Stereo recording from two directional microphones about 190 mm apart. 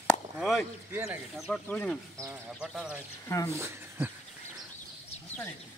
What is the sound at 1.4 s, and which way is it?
Speech, 5° left (ahead or behind).